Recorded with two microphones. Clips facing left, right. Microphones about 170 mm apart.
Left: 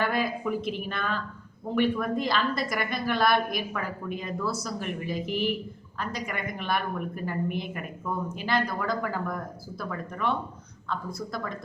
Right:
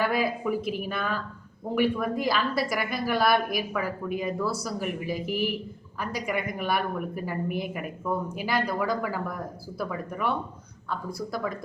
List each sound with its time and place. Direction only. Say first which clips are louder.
0.0 s a woman's voice: right 2 dB; 5° right (ahead or behind)